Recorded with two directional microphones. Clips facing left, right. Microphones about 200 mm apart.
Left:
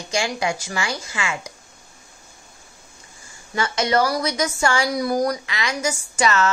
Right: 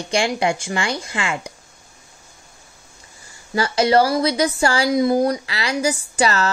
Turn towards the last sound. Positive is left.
turn(degrees=-35)  # may be behind; listen again after turning